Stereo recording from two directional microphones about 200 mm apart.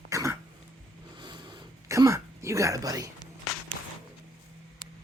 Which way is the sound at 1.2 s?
20° right (ahead or behind).